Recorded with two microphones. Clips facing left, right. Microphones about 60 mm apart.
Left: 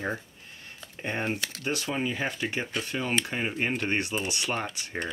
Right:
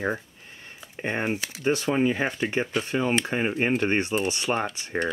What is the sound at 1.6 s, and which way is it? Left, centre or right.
Speech, right.